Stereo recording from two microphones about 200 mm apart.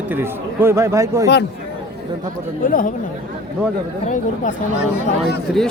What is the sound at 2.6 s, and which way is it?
Speech, 45° left (ahead or behind).